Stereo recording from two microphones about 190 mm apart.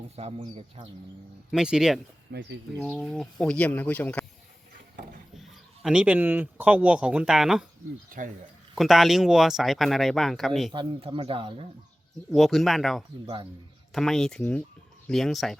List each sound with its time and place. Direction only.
0.2 s speech: 30° right (ahead or behind)
1.5 s speech: 5° right (ahead or behind)
2.3 s speech: 65° right (ahead or behind)
3.0 s speech: centre (ahead or behind)
5.3 s speech: centre (ahead or behind)
8.7 s speech: centre (ahead or behind)
10.7 s speech: 25° right (ahead or behind)
12.3 s speech: centre (ahead or behind)
13.2 s speech: 25° right (ahead or behind)
13.9 s speech: centre (ahead or behind)